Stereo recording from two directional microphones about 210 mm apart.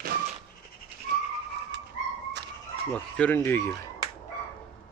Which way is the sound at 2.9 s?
5° left (ahead or behind).